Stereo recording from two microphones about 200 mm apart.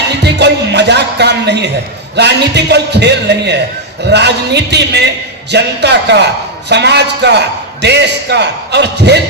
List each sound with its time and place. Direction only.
0.2 s a man's voice: 60° right (ahead or behind)